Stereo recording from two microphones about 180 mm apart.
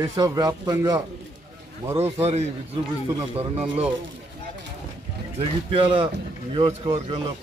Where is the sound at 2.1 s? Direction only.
35° right (ahead or behind).